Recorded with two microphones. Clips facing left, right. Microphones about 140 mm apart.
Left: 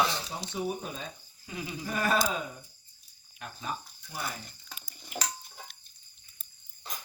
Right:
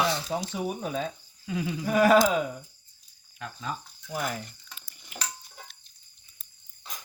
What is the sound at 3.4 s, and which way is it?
Speech, 90° right.